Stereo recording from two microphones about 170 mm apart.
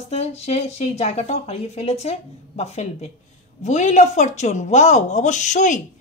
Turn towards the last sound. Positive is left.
turn(degrees=45)  # may be behind; listen again after turning